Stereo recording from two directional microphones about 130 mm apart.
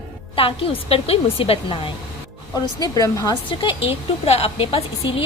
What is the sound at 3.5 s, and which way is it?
A woman's voice, 40° left (ahead or behind).